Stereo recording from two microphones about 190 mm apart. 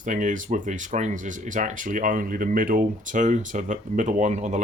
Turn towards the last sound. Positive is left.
turn(degrees=-40)  # may be behind; listen again after turning